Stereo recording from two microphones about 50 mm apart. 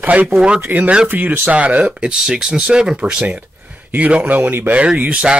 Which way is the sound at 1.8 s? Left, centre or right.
Centre.